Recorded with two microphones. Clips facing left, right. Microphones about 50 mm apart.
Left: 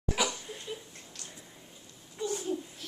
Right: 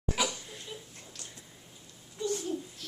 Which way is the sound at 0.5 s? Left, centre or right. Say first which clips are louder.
Left 4 dB; centre.